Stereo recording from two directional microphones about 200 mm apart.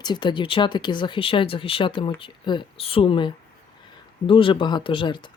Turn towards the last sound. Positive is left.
turn(degrees=25)  # may be behind; listen again after turning